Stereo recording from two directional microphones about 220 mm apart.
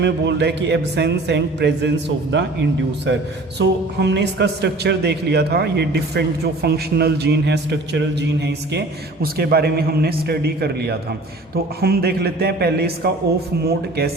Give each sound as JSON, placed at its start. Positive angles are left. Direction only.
{"t": 0.0, "sound": "a man's voice", "side_deg": -50}